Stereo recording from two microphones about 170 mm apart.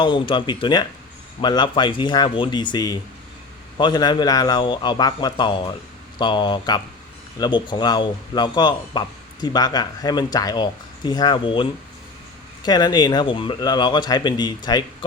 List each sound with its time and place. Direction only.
0.0 s a man's voice: 25° left (ahead or behind)